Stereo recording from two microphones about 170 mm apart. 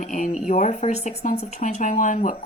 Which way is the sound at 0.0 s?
45° left (ahead or behind).